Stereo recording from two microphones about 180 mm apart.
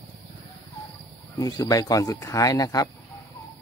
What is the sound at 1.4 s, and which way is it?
Speech, 20° left (ahead or behind).